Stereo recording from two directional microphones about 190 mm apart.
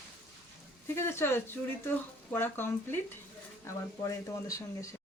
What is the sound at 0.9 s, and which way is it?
Speech, 15° left (ahead or behind).